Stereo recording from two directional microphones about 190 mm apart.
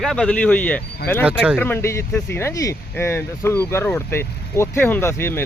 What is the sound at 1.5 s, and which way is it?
Speech, 10° left (ahead or behind).